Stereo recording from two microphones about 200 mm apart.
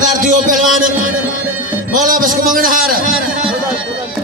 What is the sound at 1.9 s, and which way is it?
A man's voice, 45° right (ahead or behind).